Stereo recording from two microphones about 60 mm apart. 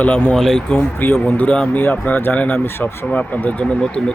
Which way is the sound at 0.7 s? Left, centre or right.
Centre.